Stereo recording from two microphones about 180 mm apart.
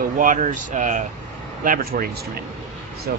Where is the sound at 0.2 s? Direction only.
45° right (ahead or behind).